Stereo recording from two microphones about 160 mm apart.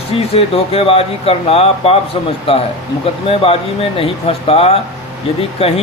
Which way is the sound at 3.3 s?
35° left (ahead or behind).